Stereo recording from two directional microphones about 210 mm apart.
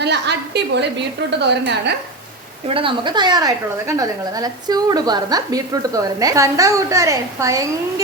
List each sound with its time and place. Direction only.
0.0 s a woman's voice: 55° right (ahead or behind)
2.6 s a woman's voice: 25° right (ahead or behind)